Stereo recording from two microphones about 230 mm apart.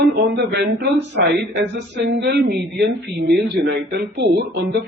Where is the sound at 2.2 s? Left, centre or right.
Right.